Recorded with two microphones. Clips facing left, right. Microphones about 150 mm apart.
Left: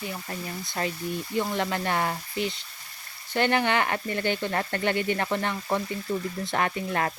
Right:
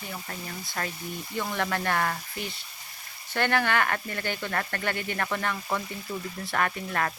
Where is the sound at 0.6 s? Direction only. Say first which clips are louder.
Left 5 dB; 20° left (ahead or behind).